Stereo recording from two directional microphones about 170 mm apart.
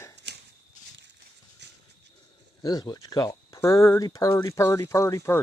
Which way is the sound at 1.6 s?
85° right.